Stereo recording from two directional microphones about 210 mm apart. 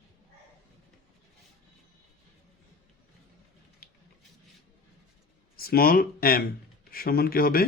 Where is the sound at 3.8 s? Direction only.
45° left (ahead or behind).